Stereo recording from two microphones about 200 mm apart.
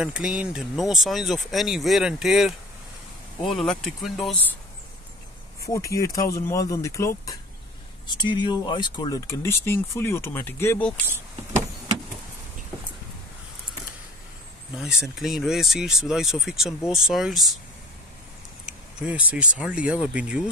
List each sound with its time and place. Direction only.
0.0 s speech: 5° right (ahead or behind)
5.7 s speech: 15° left (ahead or behind)
14.8 s speech: centre (ahead or behind)
18.9 s speech: 5° right (ahead or behind)